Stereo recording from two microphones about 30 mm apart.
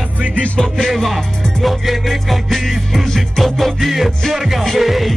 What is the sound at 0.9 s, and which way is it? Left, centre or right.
Music, centre.